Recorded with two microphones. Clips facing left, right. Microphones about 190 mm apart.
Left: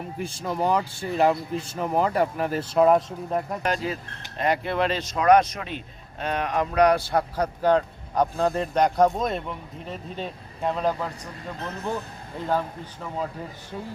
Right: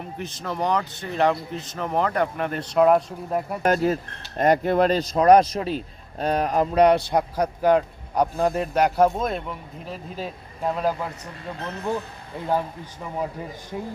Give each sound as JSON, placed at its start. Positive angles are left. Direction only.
{"t": 0.2, "sound": "a man's voice", "side_deg": 10}
{"t": 3.6, "sound": "a man's voice", "side_deg": -45}
{"t": 12.5, "sound": "a man's voice", "side_deg": -10}